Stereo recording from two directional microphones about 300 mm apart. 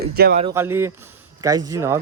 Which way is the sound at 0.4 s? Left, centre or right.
Centre.